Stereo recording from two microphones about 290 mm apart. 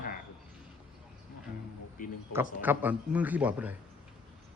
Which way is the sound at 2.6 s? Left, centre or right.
Centre.